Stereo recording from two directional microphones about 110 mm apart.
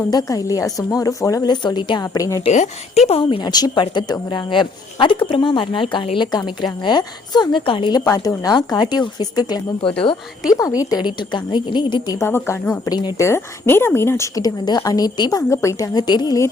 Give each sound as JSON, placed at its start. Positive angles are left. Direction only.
{"t": 0.1, "sound": "a woman's voice", "side_deg": 35}
{"t": 2.1, "sound": "a woman's voice", "side_deg": 30}
{"t": 2.4, "sound": "speech", "side_deg": 80}
{"t": 3.1, "sound": "a woman's voice", "side_deg": 55}
{"t": 3.5, "sound": "a woman's voice", "side_deg": 40}
{"t": 8.0, "sound": "a woman's voice", "side_deg": 30}
{"t": 12.0, "sound": "a woman's voice", "side_deg": 35}
{"t": 12.3, "sound": "speech", "side_deg": 20}
{"t": 13.2, "sound": "a woman's voice", "side_deg": 20}